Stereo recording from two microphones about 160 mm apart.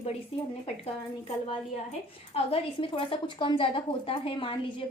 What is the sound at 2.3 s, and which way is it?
A woman's voice, 35° left (ahead or behind).